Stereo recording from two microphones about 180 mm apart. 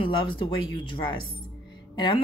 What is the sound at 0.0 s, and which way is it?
Speech, 30° left (ahead or behind).